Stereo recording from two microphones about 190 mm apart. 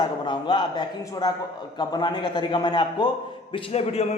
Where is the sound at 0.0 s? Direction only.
25° left (ahead or behind).